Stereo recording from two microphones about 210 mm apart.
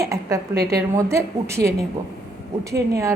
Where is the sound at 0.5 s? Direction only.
50° right (ahead or behind).